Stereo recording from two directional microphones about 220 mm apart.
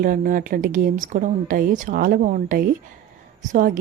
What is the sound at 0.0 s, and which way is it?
A woman's voice, 40° right (ahead or behind).